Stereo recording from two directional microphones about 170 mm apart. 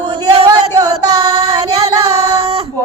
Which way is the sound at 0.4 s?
20° right (ahead or behind).